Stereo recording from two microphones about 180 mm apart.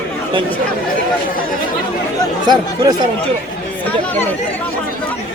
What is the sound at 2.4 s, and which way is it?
Speech, 20° right (ahead or behind).